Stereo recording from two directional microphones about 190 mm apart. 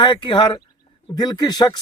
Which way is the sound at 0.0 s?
25° left (ahead or behind).